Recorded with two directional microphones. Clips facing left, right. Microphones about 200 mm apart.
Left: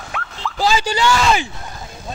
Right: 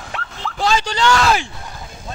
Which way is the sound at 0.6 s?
5° left (ahead or behind).